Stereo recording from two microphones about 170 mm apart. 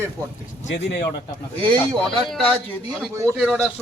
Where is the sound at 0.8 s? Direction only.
80° left.